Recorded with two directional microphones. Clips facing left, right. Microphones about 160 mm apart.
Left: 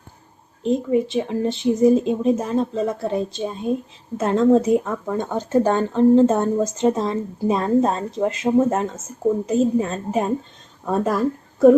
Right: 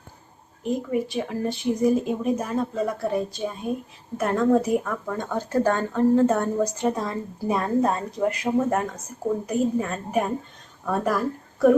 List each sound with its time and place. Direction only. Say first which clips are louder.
0.6 s speech: left 6 dB; 25° left (ahead or behind)